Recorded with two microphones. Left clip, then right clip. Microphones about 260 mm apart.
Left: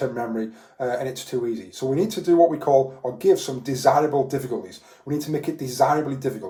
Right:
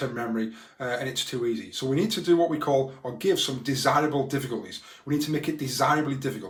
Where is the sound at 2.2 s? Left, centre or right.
Right.